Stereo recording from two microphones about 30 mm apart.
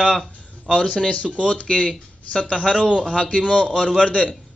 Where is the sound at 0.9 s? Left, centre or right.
Left.